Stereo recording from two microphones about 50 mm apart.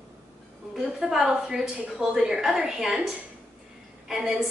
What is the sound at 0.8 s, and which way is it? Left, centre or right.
A woman's voice, centre.